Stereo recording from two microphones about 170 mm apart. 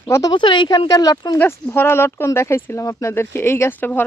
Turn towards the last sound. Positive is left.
turn(degrees=10)  # may be behind; listen again after turning